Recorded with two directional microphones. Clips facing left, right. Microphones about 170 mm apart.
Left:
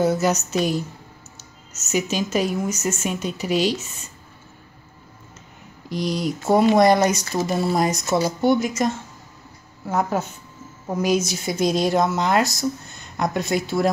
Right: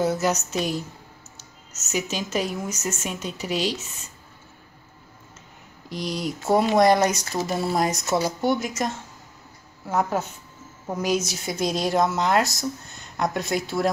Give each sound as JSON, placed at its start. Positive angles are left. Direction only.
{"t": 0.0, "sound": "speech", "side_deg": 0}
{"t": 1.9, "sound": "speech", "side_deg": 0}
{"t": 5.9, "sound": "speech", "side_deg": 45}
{"t": 6.4, "sound": "speech", "side_deg": 0}